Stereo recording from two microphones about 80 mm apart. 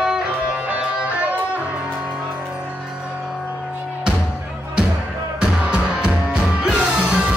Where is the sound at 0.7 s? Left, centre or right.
Centre.